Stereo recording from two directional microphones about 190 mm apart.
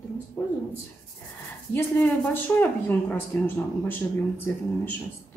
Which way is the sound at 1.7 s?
10° left (ahead or behind).